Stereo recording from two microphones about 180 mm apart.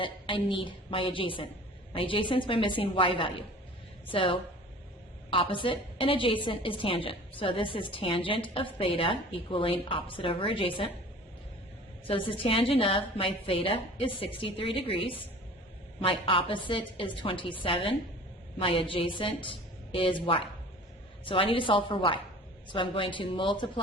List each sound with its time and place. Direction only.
0.0 s a woman's voice: 30° left (ahead or behind)
12.0 s a woman's voice: 30° left (ahead or behind)